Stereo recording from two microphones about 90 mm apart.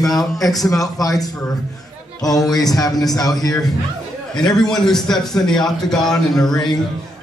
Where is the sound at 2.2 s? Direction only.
45° left (ahead or behind).